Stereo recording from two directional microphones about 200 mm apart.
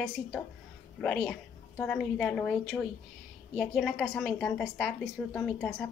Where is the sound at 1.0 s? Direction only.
5° left (ahead or behind).